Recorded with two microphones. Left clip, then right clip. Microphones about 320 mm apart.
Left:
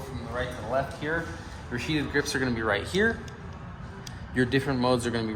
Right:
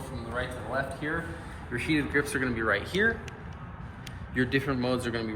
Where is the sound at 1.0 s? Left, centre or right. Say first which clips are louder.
Left 2 dB; left.